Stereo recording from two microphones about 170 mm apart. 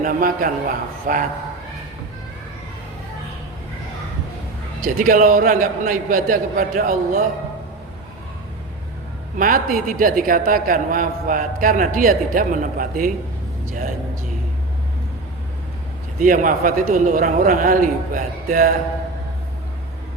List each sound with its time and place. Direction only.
0.0 s a man's voice: 55° right (ahead or behind)
4.8 s a man's voice: 55° right (ahead or behind)
9.4 s a man's voice: 55° right (ahead or behind)
16.2 s a man's voice: 50° right (ahead or behind)